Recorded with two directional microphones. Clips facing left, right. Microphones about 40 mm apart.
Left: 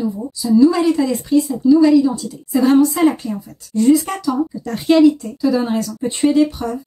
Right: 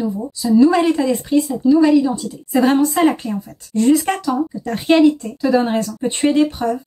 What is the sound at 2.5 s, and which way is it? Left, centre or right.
A woman's voice, right.